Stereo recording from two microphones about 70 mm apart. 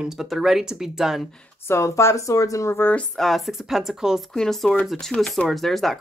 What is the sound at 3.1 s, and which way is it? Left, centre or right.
Speech, centre.